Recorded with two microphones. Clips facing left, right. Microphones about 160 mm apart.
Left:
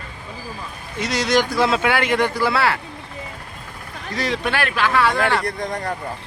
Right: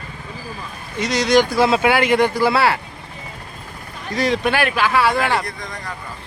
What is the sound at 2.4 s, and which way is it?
Speech, 15° right (ahead or behind).